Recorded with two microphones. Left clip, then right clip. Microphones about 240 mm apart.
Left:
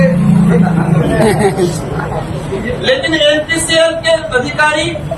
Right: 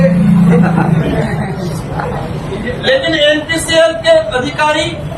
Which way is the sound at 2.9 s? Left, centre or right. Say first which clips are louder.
Right 1 dB; centre.